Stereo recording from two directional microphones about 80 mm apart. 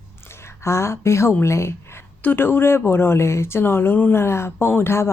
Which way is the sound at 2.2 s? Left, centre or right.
Left.